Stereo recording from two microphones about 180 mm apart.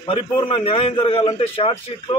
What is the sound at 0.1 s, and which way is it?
A man's voice, 30° left (ahead or behind).